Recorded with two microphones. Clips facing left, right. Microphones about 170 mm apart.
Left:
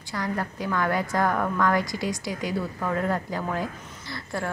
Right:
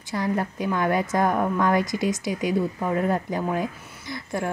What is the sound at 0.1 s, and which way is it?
A woman's voice, 25° right (ahead or behind).